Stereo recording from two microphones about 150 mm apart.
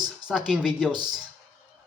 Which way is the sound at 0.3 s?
5° right (ahead or behind).